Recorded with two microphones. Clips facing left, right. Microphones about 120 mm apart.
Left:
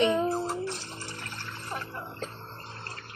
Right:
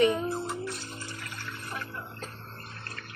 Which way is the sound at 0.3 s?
35° left (ahead or behind).